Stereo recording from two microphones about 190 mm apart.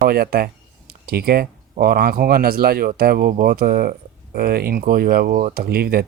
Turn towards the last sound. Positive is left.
turn(degrees=-55)  # may be behind; listen again after turning